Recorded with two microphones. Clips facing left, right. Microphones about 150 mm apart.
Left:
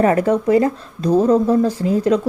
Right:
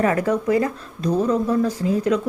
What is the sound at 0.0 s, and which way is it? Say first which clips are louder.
Speech: left 5 dB; 30° left (ahead or behind).